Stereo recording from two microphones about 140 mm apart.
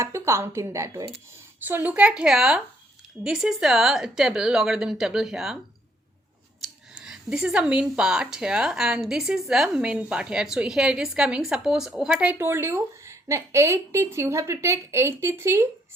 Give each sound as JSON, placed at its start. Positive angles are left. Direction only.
{"t": 0.0, "sound": "a woman's voice", "side_deg": -20}
{"t": 6.6, "sound": "a woman's voice", "side_deg": -5}